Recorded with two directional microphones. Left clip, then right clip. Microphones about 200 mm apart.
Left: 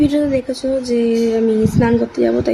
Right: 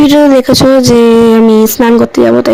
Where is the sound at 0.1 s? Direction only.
50° right (ahead or behind).